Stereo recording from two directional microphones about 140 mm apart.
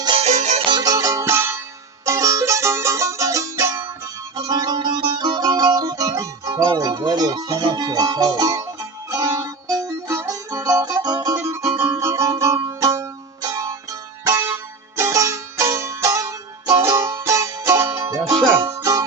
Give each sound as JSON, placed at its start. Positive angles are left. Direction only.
{"t": 0.2, "sound": "music", "side_deg": -55}
{"t": 0.7, "sound": "music", "side_deg": -25}
{"t": 4.4, "sound": "music", "side_deg": -30}
{"t": 11.3, "sound": "music", "side_deg": -15}